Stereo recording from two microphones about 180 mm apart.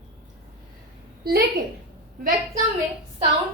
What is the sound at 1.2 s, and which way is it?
Speech, 60° right (ahead or behind).